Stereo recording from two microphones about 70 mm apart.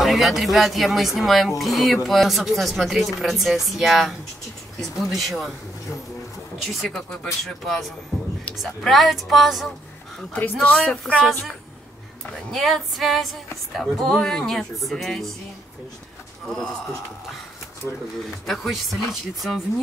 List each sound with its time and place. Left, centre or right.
0.0 s speech: centre
6.6 s speech: centre
10.6 s speech: centre
12.4 s speech: centre
16.4 s speech: centre
18.5 s speech: centre